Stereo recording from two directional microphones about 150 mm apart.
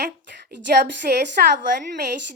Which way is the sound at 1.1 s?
80° right.